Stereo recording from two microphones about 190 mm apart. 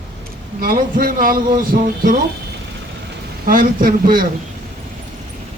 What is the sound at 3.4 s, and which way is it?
Speech, 50° right (ahead or behind).